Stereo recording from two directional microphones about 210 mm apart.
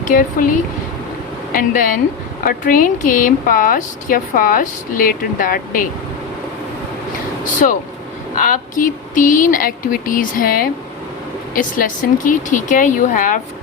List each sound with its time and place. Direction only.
0.0 s speech: 40° left (ahead or behind)
1.5 s speech: 40° left (ahead or behind)
7.6 s speech: 35° left (ahead or behind)